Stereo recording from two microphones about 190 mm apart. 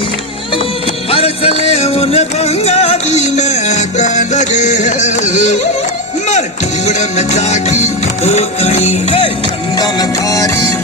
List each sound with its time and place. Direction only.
1.1 s music: 30° left (ahead or behind)
6.8 s music: 35° left (ahead or behind); by 10.5 s 20° left (ahead or behind)